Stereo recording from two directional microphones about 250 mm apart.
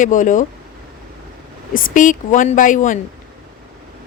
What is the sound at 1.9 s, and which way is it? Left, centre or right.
A woman's voice, left.